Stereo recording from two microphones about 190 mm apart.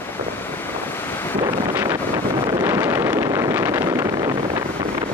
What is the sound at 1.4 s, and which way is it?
Wind noise, 15° right (ahead or behind).